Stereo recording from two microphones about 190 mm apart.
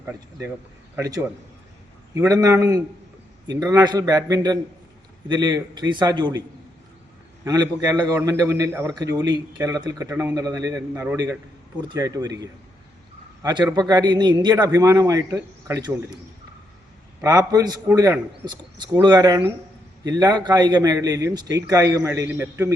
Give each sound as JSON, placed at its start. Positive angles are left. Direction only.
{"t": 0.0, "sound": "a man's voice", "side_deg": -15}
{"t": 7.4, "sound": "a man's voice", "side_deg": -20}
{"t": 17.2, "sound": "a man's voice", "side_deg": -20}